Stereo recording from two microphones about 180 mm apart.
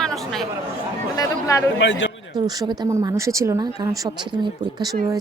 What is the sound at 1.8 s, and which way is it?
Speech, 85° left.